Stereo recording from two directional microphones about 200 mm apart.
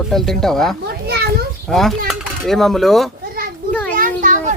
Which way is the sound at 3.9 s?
40° right (ahead or behind).